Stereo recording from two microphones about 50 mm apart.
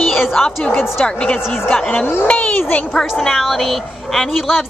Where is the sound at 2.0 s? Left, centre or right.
Left.